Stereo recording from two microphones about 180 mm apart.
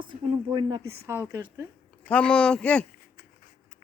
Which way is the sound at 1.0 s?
15° right (ahead or behind).